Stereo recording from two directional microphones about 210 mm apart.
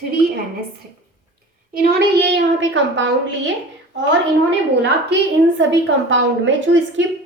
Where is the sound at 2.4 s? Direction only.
60° right (ahead or behind).